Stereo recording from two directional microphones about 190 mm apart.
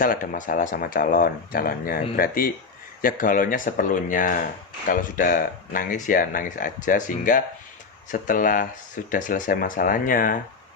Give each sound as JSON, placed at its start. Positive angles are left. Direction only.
{"t": 0.0, "sound": "speech", "side_deg": 45}